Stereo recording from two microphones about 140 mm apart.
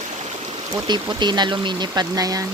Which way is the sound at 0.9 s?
30° right (ahead or behind).